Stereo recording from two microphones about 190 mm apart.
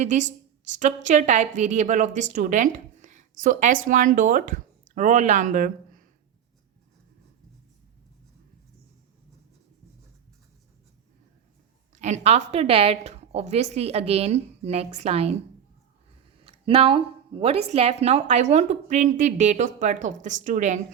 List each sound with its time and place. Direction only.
0.0 s a woman's voice: 40° right (ahead or behind)
11.9 s a woman's voice: 40° right (ahead or behind)
16.5 s a sound: 30° right (ahead or behind)
17.4 s a woman's voice: 30° right (ahead or behind)